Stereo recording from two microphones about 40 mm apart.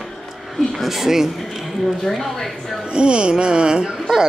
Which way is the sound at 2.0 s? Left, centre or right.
Centre.